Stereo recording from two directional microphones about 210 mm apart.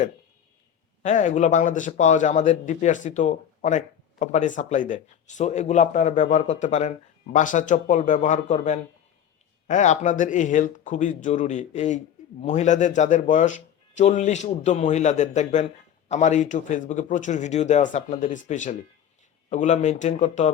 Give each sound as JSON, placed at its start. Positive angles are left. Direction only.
{"t": 1.0, "sound": "speech", "side_deg": 35}